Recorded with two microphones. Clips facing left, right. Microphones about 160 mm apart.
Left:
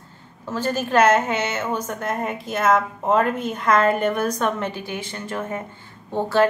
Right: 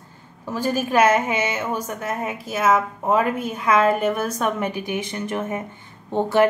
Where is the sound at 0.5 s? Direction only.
10° right (ahead or behind).